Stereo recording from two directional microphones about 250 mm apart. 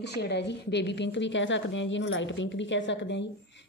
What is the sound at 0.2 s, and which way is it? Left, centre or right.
Speech, left.